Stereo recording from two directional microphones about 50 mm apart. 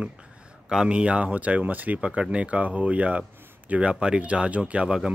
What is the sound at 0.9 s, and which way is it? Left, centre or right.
A man's voice, right.